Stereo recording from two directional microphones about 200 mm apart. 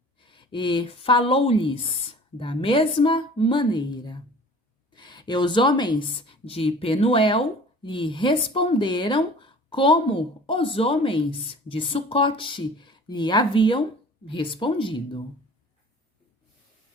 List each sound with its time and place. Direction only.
0.2 s a woman's voice: 25° left (ahead or behind)